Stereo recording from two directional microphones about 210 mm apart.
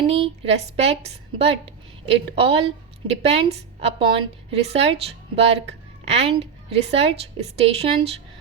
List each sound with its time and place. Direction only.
0.1 s a woman's voice: 30° right (ahead or behind)